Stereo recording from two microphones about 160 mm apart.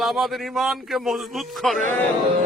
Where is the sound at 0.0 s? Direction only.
Centre (ahead or behind).